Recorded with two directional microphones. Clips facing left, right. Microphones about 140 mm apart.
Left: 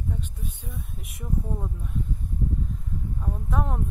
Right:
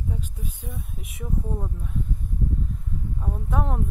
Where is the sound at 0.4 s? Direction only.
70° right (ahead or behind).